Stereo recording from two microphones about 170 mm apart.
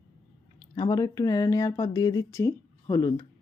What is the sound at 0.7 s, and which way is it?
Speech, 20° left (ahead or behind).